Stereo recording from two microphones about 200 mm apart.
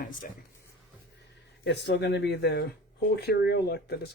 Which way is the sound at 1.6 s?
60° left (ahead or behind).